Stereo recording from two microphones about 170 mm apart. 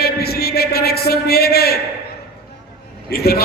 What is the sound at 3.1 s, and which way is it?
Speech, 65° left (ahead or behind).